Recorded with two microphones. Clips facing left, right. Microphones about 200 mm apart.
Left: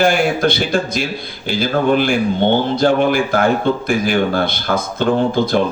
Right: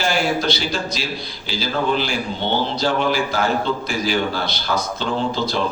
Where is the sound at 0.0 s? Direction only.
55° left (ahead or behind).